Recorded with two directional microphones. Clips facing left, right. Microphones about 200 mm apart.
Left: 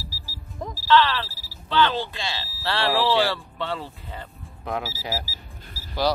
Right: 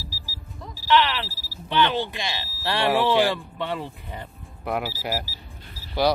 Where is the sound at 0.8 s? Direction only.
20° right (ahead or behind).